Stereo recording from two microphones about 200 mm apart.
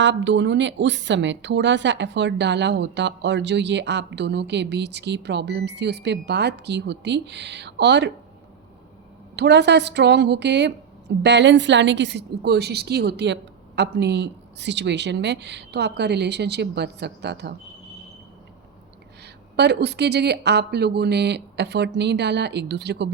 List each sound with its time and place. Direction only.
0.0 s a woman's voice: 65° right (ahead or behind)
9.3 s a woman's voice: 60° right (ahead or behind)
19.2 s a woman's voice: 55° right (ahead or behind)